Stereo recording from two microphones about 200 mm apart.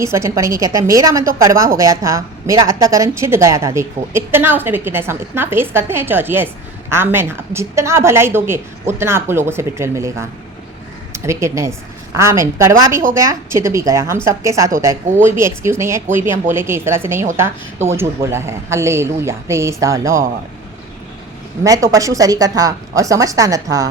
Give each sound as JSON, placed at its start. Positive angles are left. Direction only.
{"t": 0.0, "sound": "a woman's voice", "side_deg": -15}
{"t": 21.6, "sound": "a woman's voice", "side_deg": -15}